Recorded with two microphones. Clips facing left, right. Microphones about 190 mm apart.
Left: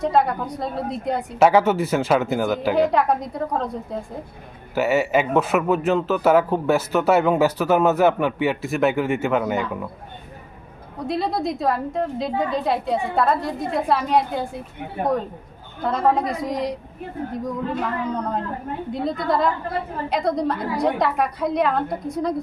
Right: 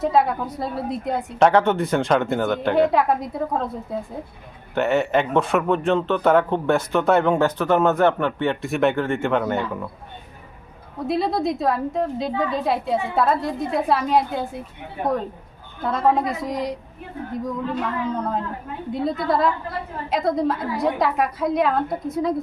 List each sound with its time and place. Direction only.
0.0 s speech: centre (ahead or behind)
11.0 s speech: centre (ahead or behind)
15.8 s speech: centre (ahead or behind)
18.2 s speech: centre (ahead or behind)